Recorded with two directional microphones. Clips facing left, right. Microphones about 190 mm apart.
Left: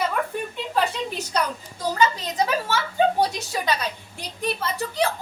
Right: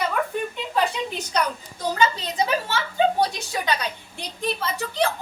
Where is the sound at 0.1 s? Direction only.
Centre (ahead or behind).